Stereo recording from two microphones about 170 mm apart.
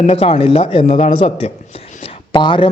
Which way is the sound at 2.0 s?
30° left (ahead or behind).